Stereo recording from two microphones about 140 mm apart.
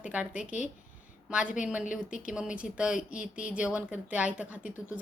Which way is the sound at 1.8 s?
70° left (ahead or behind).